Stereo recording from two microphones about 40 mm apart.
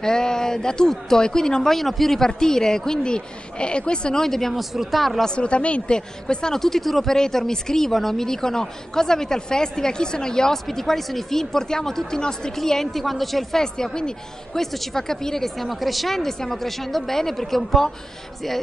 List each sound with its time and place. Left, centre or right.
0.0 s a woman's voice: centre
5.2 s a woman's voice: left; by 13.6 s centre
13.6 s a woman's voice: centre